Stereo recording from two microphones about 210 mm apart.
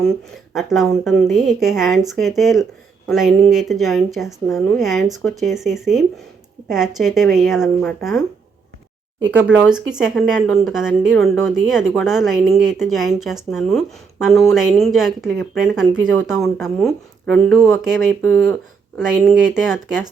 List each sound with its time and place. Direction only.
0.5 s speech: centre (ahead or behind)
9.3 s speech: 5° right (ahead or behind)